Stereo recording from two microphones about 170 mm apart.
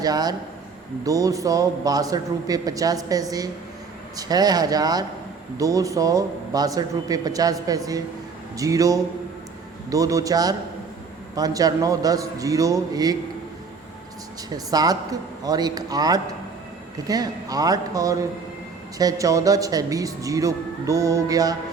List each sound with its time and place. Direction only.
0.0 s speech: 20° right (ahead or behind)
14.5 s speech: 20° right (ahead or behind)